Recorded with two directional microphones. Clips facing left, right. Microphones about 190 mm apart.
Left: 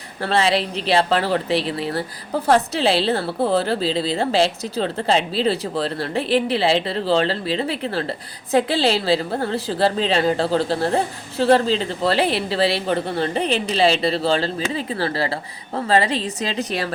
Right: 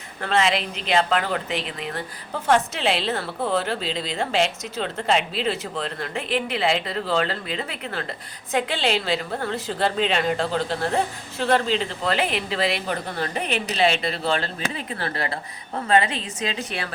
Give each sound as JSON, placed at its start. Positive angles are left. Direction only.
{"t": 0.2, "sound": "a woman's voice", "side_deg": 35}